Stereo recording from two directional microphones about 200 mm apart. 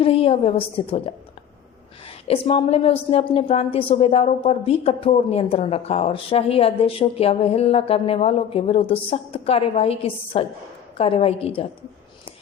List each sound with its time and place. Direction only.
0.0 s a woman's voice: 30° left (ahead or behind)
2.2 s a woman's voice: 30° left (ahead or behind)